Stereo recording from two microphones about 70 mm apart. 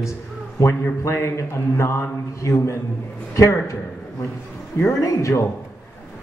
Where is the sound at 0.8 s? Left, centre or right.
Left.